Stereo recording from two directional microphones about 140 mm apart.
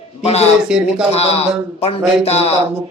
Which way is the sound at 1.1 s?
45° left (ahead or behind).